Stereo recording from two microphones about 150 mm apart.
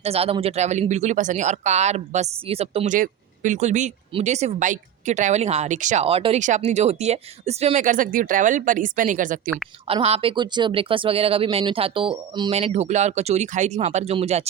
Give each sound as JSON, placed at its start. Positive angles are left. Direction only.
{"t": 0.0, "sound": "speech", "side_deg": -40}
{"t": 2.9, "sound": "speech", "side_deg": -60}
{"t": 7.9, "sound": "speech", "side_deg": -65}
{"t": 9.8, "sound": "speech", "side_deg": -40}
{"t": 12.5, "sound": "speech", "side_deg": -45}